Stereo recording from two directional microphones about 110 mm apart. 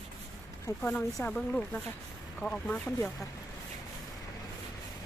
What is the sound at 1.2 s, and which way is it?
Speech, 5° left (ahead or behind).